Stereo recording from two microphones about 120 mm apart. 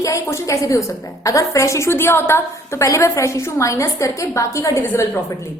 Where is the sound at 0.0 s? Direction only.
25° left (ahead or behind).